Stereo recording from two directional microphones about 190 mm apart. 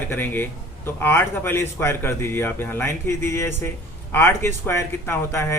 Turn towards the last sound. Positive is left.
turn(degrees=15)  # may be behind; listen again after turning